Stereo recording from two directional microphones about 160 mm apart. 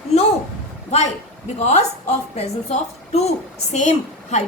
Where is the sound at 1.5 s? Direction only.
45° left (ahead or behind).